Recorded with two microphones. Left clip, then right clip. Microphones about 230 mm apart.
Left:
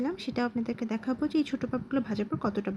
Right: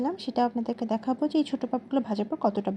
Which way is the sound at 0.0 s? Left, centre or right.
Centre.